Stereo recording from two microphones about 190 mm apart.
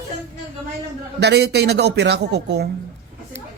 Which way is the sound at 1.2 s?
60° right (ahead or behind).